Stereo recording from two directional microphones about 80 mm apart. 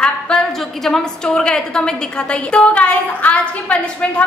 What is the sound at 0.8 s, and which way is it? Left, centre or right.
A woman's voice, centre.